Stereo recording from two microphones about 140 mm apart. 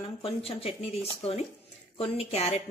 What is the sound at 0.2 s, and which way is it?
Speech, 45° left (ahead or behind).